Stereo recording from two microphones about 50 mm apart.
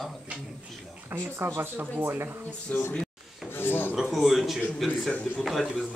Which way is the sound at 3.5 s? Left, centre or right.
Left.